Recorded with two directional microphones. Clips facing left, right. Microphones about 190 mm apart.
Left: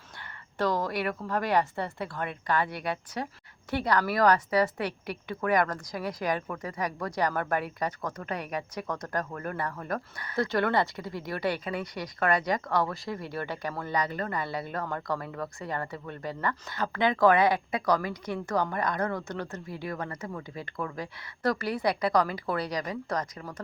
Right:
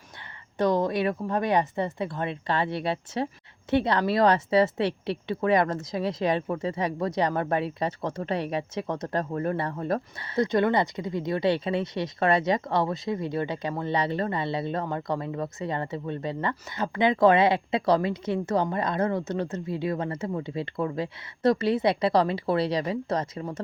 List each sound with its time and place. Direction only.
0.6 s speech: 20° right (ahead or behind)